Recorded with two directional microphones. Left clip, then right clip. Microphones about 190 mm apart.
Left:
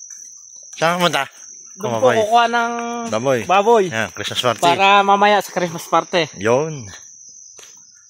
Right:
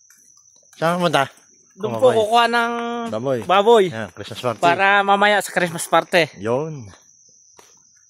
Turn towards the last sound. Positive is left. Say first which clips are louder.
# left 5 dB
turn(degrees=5)  # may be behind; listen again after turning